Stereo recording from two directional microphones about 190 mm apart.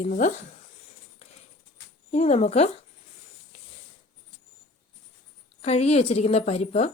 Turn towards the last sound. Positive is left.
turn(degrees=35)  # may be behind; listen again after turning